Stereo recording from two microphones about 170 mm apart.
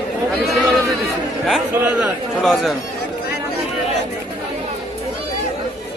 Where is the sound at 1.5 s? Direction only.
5° right (ahead or behind).